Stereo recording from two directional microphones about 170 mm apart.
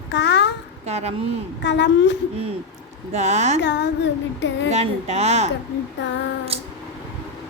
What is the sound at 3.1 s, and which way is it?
Speech, 40° right (ahead or behind).